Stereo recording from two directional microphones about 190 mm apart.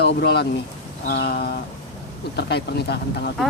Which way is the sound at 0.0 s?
60° left (ahead or behind).